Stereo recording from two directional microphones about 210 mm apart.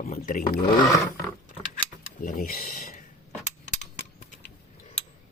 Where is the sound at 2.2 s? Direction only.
45° left (ahead or behind).